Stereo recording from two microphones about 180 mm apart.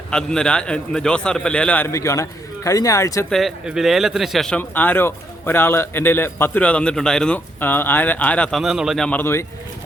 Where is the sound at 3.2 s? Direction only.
Centre (ahead or behind).